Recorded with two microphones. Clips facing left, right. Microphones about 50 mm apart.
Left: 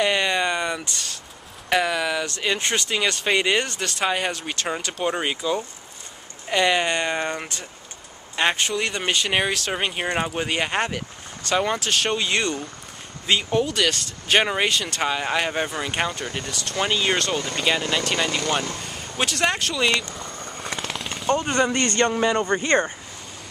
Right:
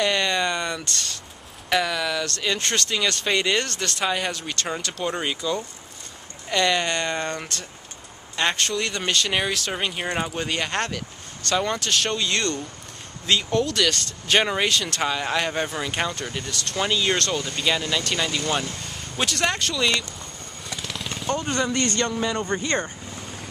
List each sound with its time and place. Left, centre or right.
0.0 s speech: centre
20.7 s machine gun: centre
21.4 s speech: centre
21.8 s speech: left